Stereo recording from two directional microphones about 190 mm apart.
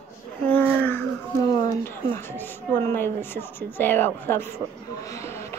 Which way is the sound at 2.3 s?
10° left (ahead or behind).